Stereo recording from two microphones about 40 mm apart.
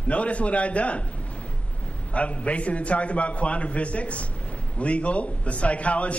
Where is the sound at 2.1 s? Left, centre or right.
Left.